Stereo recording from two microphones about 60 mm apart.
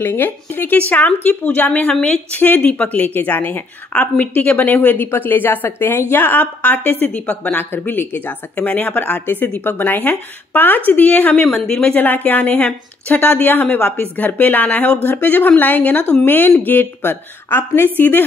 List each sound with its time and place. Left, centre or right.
0.0 s a woman's voice: left; by 2.1 s centre
2.3 s a woman's voice: left
11.1 s a woman's voice: left
11.4 s speech: centre
11.9 s a woman's voice: left